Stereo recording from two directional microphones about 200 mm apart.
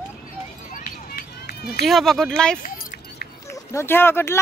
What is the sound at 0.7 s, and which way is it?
Run, 50° left (ahead or behind).